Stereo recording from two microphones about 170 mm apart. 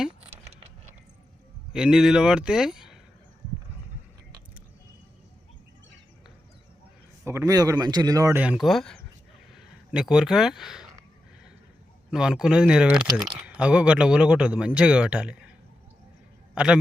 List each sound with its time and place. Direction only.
1.7 s a man's voice: 5° right (ahead or behind)
7.3 s a man's voice: 20° right (ahead or behind)
8.4 s a man's voice: 5° right (ahead or behind)
12.1 s a man's voice: 5° right (ahead or behind)